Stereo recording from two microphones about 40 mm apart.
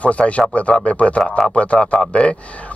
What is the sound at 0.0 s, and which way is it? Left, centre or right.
Speech, left.